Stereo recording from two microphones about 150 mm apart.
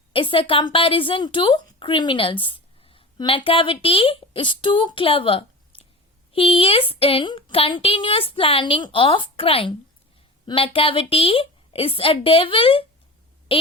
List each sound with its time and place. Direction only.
0.1 s a woman's voice: 35° left (ahead or behind)
5.7 s chewing: 35° left (ahead or behind)
6.3 s a woman's voice: 40° left (ahead or behind)
13.5 s a sound: 40° left (ahead or behind)